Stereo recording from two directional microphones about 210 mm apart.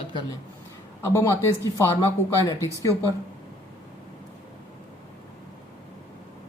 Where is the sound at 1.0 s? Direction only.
10° left (ahead or behind).